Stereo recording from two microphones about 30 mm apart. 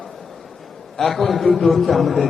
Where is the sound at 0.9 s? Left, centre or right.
Centre.